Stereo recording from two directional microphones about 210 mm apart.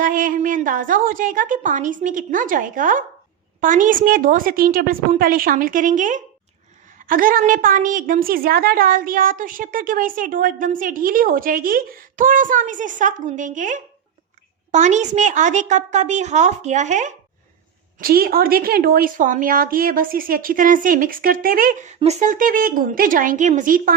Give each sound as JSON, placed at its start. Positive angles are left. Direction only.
{"t": 0.0, "sound": "a woman's voice", "side_deg": -40}
{"t": 18.0, "sound": "a woman's voice", "side_deg": -45}